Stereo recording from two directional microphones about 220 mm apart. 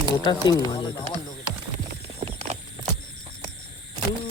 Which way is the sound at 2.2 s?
25° right (ahead or behind).